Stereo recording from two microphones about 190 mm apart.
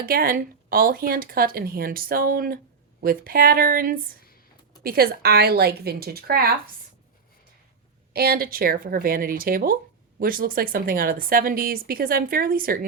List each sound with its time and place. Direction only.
0.0 s a woman's voice: 50° right (ahead or behind)
8.1 s a woman's voice: 55° right (ahead or behind)